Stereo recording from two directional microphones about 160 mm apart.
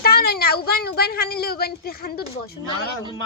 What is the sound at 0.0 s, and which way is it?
Speech, 70° left (ahead or behind).